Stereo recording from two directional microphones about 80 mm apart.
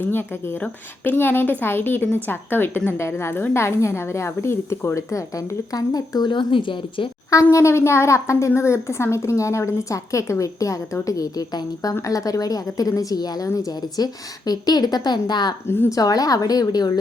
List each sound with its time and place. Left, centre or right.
0.0 s a woman's voice: left
7.5 s a woman's voice: left
15.6 s a woman's voice: left
15.9 s speech: left